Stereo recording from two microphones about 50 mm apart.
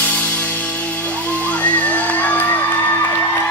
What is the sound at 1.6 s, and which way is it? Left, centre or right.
Crowd, left.